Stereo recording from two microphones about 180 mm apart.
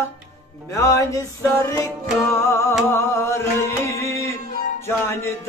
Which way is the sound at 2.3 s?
15° left (ahead or behind).